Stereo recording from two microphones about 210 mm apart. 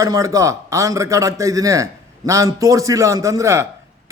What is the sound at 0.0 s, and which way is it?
A man's voice, 15° right (ahead or behind).